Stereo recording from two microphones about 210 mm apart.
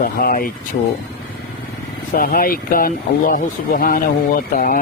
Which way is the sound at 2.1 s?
45° left (ahead or behind).